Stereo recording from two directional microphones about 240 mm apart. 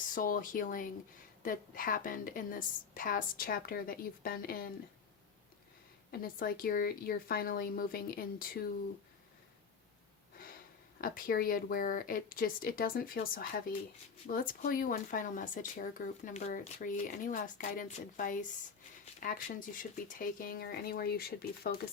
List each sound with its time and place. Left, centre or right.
0.1 s speech: left
6.1 s speech: left
10.9 s speech: left